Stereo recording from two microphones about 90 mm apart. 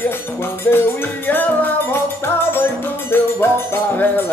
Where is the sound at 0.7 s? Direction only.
20° left (ahead or behind).